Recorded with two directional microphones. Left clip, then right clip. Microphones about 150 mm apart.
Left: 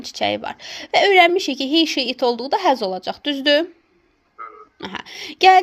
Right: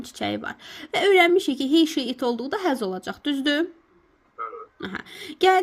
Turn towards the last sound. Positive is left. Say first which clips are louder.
# left 7 dB
turn(degrees=-30)  # may be behind; listen again after turning